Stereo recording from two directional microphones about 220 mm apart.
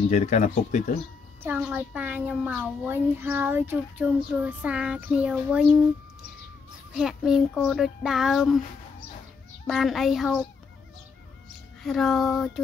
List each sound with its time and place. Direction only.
0.1 s speech: 30° left (ahead or behind)
1.4 s a woman's voice: 10° right (ahead or behind)
6.9 s a child's voice: 5° right (ahead or behind)
9.7 s a child's voice: centre (ahead or behind)
11.8 s a child's voice: centre (ahead or behind)